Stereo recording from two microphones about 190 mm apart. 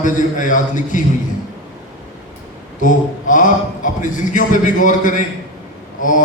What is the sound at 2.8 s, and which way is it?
A man's voice, 45° left (ahead or behind).